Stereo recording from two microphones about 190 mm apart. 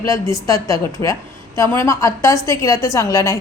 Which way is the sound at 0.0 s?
15° left (ahead or behind).